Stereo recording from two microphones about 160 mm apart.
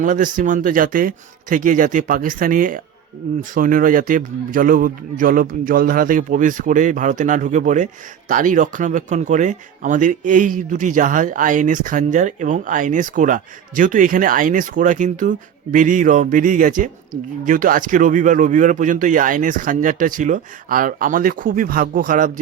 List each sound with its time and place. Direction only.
0.0 s speech: 55° right (ahead or behind)